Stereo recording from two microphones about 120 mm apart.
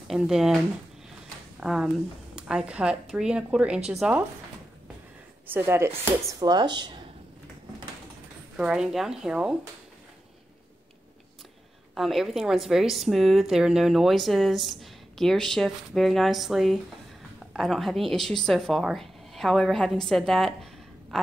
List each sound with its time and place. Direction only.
0.1 s a woman's voice: centre (ahead or behind)
1.6 s speech: 5° right (ahead or behind)
5.5 s speech: 20° right (ahead or behind)
6.4 s speech: 35° right (ahead or behind)
8.5 s a woman's voice: 5° right (ahead or behind)
11.9 s a woman's voice: centre (ahead or behind)